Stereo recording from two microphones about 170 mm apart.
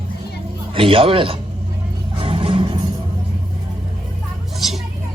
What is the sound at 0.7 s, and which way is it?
Speech, 30° right (ahead or behind).